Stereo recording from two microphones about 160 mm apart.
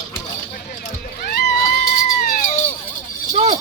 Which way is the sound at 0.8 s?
75° left (ahead or behind).